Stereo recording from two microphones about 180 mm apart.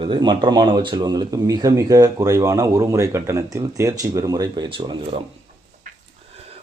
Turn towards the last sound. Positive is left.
turn(degrees=-30)  # may be behind; listen again after turning